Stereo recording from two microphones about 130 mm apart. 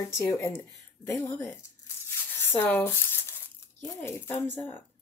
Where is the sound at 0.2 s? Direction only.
20° left (ahead or behind).